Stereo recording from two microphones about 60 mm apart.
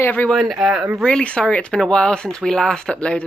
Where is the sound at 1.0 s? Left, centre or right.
Centre.